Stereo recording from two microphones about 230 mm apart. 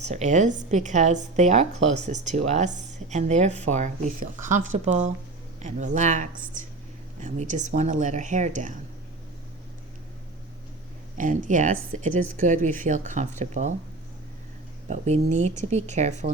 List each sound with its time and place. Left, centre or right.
0.1 s speech: right
11.2 s speech: right
14.8 s speech: right